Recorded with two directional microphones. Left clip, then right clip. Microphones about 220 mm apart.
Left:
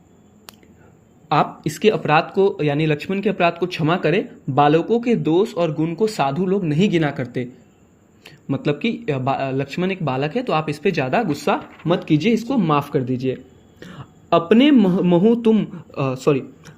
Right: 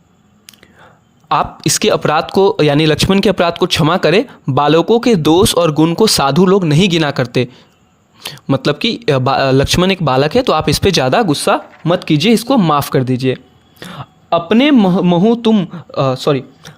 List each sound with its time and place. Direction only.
1.3 s speech: 50° right (ahead or behind); by 16.7 s 35° right (ahead or behind)